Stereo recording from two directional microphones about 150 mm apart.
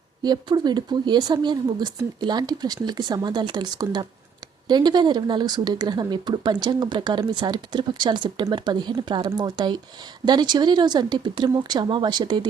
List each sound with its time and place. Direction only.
0.2 s speech: 30° right (ahead or behind)